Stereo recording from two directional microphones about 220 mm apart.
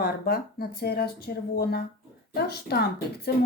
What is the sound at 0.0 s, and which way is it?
Speech, 45° left (ahead or behind).